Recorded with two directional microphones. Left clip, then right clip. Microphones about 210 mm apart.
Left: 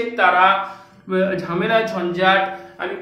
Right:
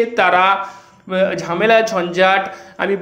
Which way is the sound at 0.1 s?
50° right (ahead or behind).